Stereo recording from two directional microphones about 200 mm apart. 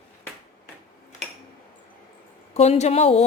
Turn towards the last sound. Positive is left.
turn(degrees=30)  # may be behind; listen again after turning